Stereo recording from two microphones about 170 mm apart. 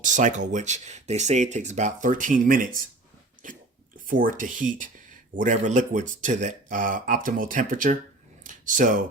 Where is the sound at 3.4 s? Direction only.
50° right (ahead or behind).